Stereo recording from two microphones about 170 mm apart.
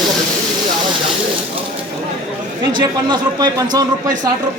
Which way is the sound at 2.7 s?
25° right (ahead or behind).